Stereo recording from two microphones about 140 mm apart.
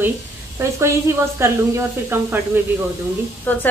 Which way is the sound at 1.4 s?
20° right (ahead or behind).